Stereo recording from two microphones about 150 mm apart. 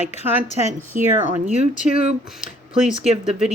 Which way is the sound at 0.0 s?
50° left (ahead or behind).